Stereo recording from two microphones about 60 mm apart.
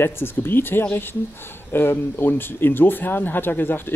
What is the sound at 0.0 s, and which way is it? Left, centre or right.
Speech, left.